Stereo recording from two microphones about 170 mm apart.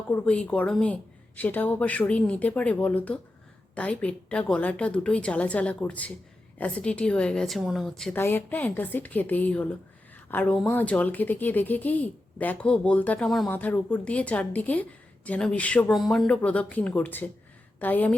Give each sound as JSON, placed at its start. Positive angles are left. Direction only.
{"t": 0.1, "sound": "a woman's voice", "side_deg": 10}